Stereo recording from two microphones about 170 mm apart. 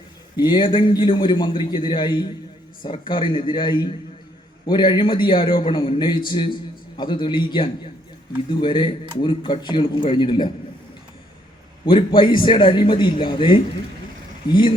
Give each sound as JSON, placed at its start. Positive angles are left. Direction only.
{"t": 0.3, "sound": "a man's voice", "side_deg": 25}
{"t": 11.9, "sound": "a man's voice", "side_deg": 30}